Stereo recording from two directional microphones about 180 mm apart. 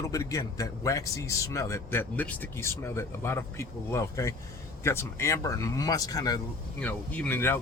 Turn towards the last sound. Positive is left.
turn(degrees=10)  # may be behind; listen again after turning